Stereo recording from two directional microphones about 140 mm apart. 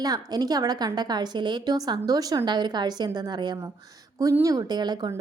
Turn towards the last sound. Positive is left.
turn(degrees=-30)  # may be behind; listen again after turning